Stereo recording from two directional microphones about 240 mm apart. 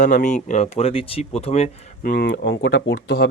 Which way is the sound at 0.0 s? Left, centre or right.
Left.